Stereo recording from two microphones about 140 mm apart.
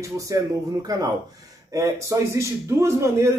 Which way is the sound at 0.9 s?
25° right (ahead or behind).